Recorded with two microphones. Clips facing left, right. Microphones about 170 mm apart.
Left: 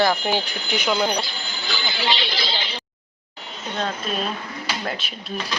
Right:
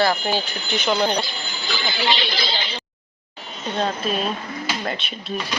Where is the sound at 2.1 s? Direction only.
50° right (ahead or behind).